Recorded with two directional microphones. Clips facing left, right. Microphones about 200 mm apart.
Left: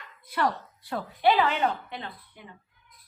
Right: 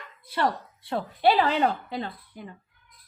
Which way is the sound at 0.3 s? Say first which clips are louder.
Right 1 dB; 30° right (ahead or behind).